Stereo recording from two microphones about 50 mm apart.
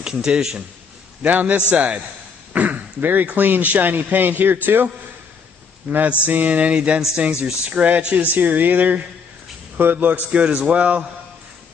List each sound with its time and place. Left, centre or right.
0.0 s a man's voice: centre
1.2 s a man's voice: right
5.9 s a man's voice: right